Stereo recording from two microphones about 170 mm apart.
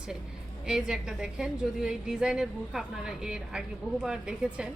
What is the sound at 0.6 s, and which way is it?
A woman's voice, 5° right (ahead or behind).